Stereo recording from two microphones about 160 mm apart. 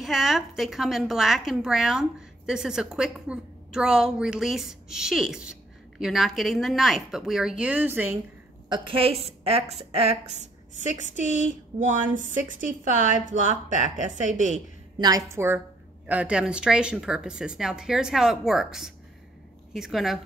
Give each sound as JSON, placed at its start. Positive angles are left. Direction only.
{"t": 0.0, "sound": "a woman's voice", "side_deg": 0}
{"t": 8.6, "sound": "a woman's voice", "side_deg": -30}
{"t": 15.0, "sound": "a woman's voice", "side_deg": -25}